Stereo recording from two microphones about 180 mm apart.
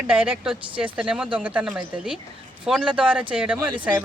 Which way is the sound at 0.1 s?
5° right (ahead or behind).